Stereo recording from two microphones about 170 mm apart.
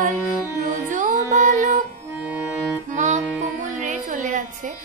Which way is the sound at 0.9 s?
45° right (ahead or behind).